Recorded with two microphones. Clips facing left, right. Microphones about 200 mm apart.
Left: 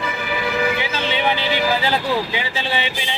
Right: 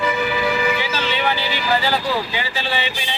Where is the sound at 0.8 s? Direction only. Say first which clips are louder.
Left 1 dB; 15° left (ahead or behind).